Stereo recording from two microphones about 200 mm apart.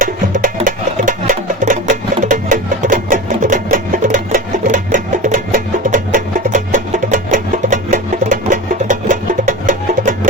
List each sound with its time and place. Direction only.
0.0 s music: 40° right (ahead or behind)